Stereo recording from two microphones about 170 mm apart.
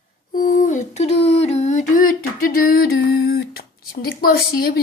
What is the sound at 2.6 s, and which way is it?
A woman's voice, 60° left (ahead or behind).